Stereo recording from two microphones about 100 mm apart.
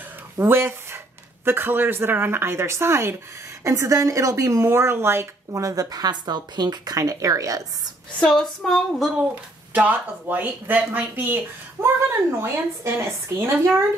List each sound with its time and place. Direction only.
0.4 s speech: 25° right (ahead or behind)
8.2 s female singing: 5° left (ahead or behind)
9.7 s a woman's voice: 15° right (ahead or behind)